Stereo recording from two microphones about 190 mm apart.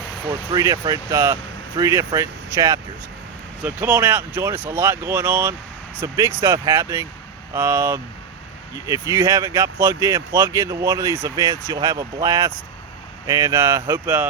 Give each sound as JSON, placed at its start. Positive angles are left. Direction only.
{"t": 0.5, "sound": "speech", "side_deg": -20}